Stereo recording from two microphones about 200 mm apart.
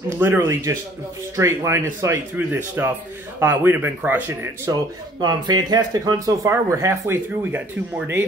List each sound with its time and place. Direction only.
0.2 s speech: 10° right (ahead or behind)